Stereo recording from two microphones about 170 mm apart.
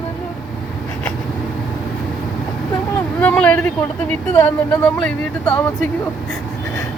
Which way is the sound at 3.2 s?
10° left (ahead or behind).